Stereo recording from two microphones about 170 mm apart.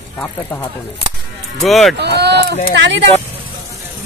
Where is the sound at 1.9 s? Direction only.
80° right.